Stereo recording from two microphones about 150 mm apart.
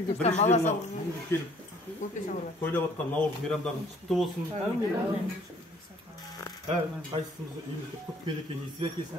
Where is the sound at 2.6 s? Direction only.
10° left (ahead or behind).